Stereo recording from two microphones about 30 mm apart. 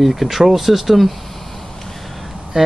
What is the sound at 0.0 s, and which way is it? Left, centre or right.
Speech, centre.